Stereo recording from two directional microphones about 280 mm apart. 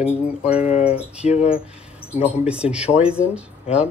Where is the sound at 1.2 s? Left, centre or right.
Left.